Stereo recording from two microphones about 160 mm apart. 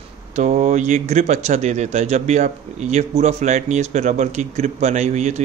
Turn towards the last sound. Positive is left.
turn(degrees=-45)  # may be behind; listen again after turning